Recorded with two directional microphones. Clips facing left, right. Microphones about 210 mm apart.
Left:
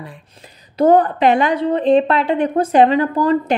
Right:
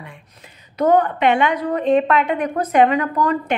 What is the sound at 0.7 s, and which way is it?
A woman's voice, 30° left (ahead or behind).